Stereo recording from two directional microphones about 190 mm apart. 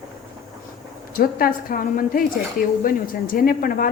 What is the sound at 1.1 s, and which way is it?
Speech, 50° left (ahead or behind).